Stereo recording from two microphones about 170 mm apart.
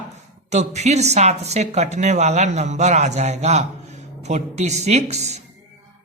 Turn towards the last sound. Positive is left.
turn(degrees=-40)  # may be behind; listen again after turning